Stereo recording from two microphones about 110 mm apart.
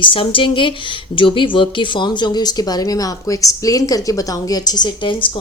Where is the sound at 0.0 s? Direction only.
50° left (ahead or behind).